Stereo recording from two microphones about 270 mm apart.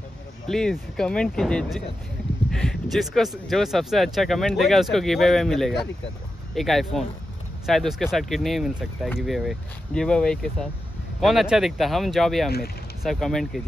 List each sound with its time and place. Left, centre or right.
0.5 s speech: centre
12.4 s speech: left
13.0 s speech: centre